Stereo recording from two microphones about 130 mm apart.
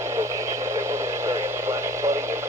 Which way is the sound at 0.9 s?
20° right (ahead or behind).